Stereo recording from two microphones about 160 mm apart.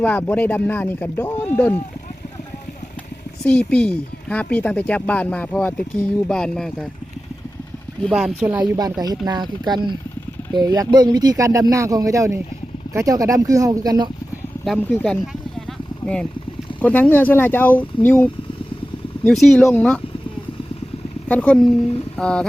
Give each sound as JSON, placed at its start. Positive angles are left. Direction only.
{"t": 0.0, "sound": "speech", "side_deg": 10}
{"t": 3.4, "sound": "speech", "side_deg": 5}
{"t": 8.0, "sound": "speech", "side_deg": -5}
{"t": 8.6, "sound": "speech", "side_deg": -25}
{"t": 14.6, "sound": "vehicle", "side_deg": 5}
{"t": 16.8, "sound": "speech", "side_deg": 10}
{"t": 21.2, "sound": "speech", "side_deg": 10}